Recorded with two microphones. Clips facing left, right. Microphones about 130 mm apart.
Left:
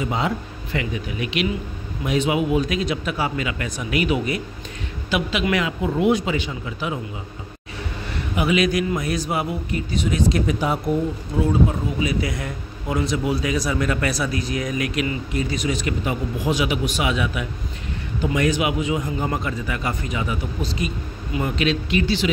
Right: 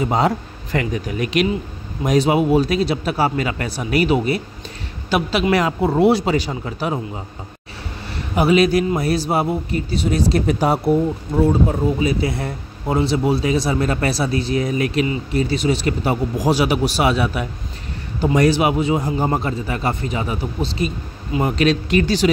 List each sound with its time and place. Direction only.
0.0 s a man's voice: 40° right (ahead or behind)
8.4 s a man's voice: 35° right (ahead or behind)